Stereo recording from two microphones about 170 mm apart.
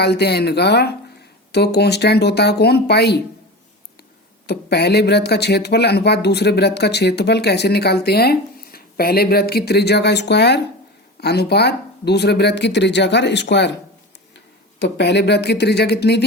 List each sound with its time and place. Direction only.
0.0 s speech: 75° left (ahead or behind)
4.4 s speech: 75° left (ahead or behind)
11.2 s speech: 70° left (ahead or behind)